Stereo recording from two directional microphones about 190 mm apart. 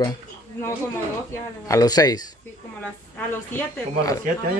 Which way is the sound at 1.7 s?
20° left (ahead or behind).